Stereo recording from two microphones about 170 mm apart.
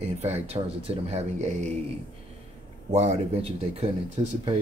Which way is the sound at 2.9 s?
40° right (ahead or behind).